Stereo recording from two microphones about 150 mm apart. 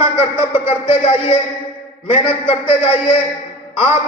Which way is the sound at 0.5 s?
40° left (ahead or behind).